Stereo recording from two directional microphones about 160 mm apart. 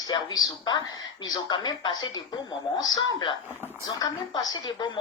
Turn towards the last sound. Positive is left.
turn(degrees=30)  # may be behind; listen again after turning